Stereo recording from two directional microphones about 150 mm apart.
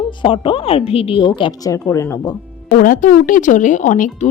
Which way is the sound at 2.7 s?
65° left (ahead or behind).